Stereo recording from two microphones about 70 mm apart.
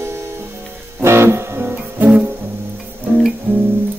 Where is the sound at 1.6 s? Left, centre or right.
Right.